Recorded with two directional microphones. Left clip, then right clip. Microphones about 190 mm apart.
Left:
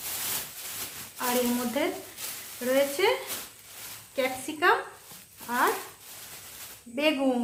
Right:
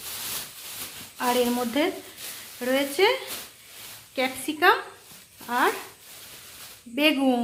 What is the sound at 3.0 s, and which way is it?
Speech, 45° right (ahead or behind).